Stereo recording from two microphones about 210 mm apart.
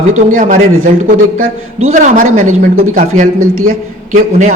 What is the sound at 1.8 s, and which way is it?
Speech, 35° right (ahead or behind).